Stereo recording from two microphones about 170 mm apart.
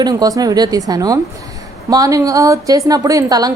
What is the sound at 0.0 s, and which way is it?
A woman's voice, 20° right (ahead or behind).